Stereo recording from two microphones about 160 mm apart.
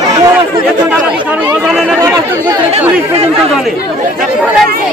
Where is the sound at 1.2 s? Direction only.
10° right (ahead or behind).